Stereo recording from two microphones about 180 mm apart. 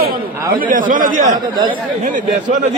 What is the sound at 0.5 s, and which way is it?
A man's voice, 50° right (ahead or behind).